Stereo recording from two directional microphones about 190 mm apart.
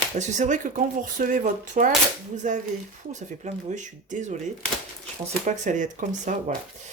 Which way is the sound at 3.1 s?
40° right (ahead or behind).